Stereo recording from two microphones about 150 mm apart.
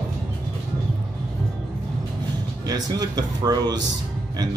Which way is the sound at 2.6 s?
25° right (ahead or behind).